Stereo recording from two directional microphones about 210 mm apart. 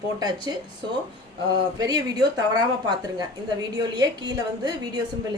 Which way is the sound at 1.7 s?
20° right (ahead or behind).